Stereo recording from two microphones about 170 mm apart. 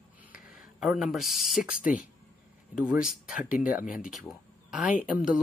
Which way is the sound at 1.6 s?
50° left (ahead or behind).